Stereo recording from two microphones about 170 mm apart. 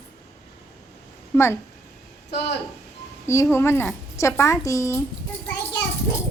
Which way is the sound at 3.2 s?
15° left (ahead or behind).